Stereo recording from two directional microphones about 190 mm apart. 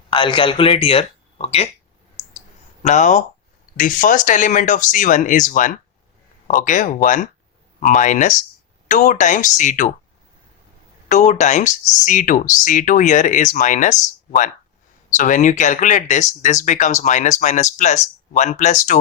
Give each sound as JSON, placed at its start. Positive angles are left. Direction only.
{"t": 0.1, "sound": "speech", "side_deg": 25}
{"t": 2.8, "sound": "speech", "side_deg": 40}
{"t": 11.1, "sound": "speech", "side_deg": 40}
{"t": 15.1, "sound": "speech", "side_deg": 40}